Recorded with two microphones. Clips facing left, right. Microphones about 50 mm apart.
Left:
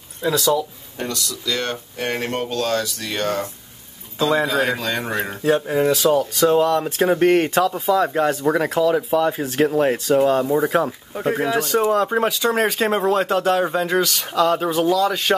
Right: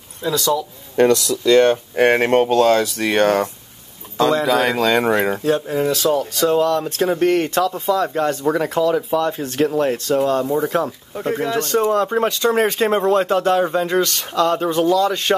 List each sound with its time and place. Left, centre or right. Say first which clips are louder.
0.3 s speech: even; centre
0.9 s speech: right 13 dB; right
1.3 s speech: right 12 dB; right
2.0 s speech: right 9 dB; right
4.5 s speech: right 5 dB; right
5.4 s speech: left 1 dB; centre